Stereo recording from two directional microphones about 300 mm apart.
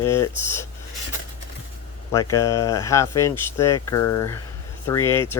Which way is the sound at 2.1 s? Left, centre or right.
Centre.